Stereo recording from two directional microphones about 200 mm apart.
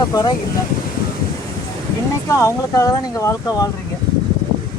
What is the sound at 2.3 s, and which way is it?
Speech, 15° left (ahead or behind).